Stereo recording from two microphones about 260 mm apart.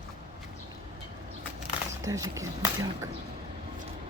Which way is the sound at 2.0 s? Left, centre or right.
Centre.